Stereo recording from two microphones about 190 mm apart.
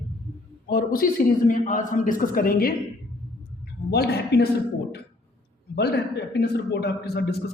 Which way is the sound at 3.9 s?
60° left (ahead or behind).